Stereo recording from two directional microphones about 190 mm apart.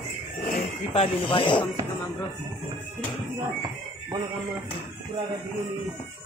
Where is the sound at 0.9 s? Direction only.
30° left (ahead or behind).